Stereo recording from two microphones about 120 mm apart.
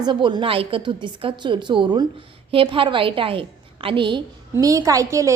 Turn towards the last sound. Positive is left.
turn(degrees=-25)  # may be behind; listen again after turning